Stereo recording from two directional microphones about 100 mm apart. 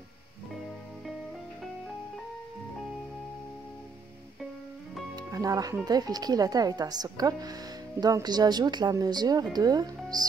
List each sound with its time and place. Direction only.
5.1 s music: 35° right (ahead or behind)
5.9 s speech: 40° right (ahead or behind)